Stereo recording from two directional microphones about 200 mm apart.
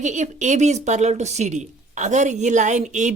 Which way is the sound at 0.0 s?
35° right (ahead or behind).